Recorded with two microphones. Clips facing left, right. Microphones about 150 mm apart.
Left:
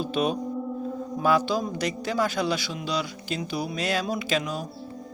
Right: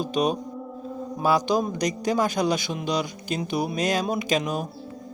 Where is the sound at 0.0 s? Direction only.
40° right (ahead or behind).